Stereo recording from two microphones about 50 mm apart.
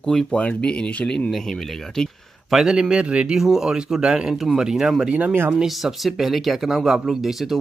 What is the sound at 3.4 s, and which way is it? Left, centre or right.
Speech, centre.